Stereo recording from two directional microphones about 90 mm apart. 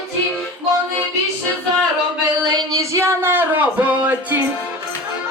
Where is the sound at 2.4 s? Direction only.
40° right (ahead or behind); by 4.3 s 15° right (ahead or behind).